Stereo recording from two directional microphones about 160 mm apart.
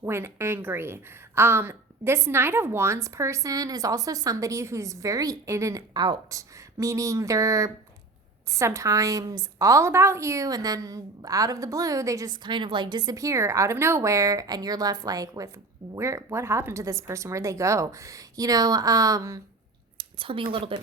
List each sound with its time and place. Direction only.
0.0 s a woman's voice: 15° right (ahead or behind)
20.0 s speech: 35° right (ahead or behind)